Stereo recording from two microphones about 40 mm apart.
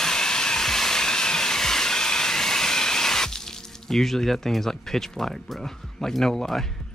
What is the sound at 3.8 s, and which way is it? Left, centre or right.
Speech, centre.